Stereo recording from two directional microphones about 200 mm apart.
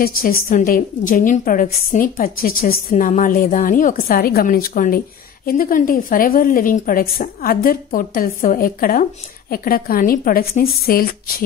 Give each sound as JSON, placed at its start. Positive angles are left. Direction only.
{"t": 0.0, "sound": "a woman's voice", "side_deg": 45}